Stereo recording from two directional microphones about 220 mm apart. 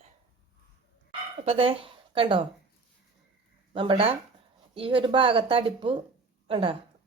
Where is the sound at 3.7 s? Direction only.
25° right (ahead or behind).